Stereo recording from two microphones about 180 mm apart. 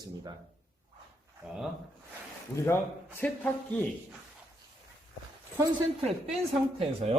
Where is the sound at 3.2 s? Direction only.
5° left (ahead or behind).